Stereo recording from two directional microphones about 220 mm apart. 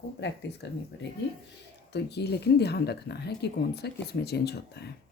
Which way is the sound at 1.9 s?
50° left (ahead or behind).